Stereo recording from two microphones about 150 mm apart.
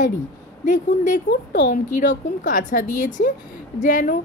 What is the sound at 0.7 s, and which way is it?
A woman's voice, 55° left (ahead or behind).